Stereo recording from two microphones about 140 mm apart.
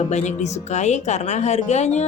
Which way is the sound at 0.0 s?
55° left (ahead or behind).